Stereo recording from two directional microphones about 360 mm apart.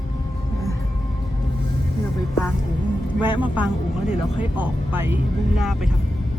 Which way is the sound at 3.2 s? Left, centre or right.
Centre.